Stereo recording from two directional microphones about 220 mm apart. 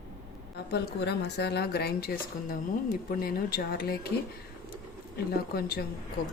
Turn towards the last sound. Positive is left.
turn(degrees=45)  # may be behind; listen again after turning